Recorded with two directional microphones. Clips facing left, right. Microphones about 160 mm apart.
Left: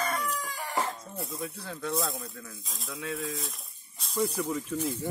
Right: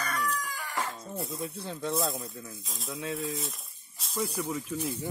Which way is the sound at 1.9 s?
Centre (ahead or behind).